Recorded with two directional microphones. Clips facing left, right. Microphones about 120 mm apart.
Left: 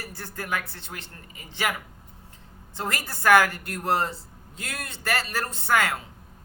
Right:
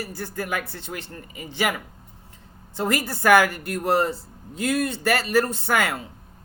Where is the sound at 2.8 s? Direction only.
10° right (ahead or behind).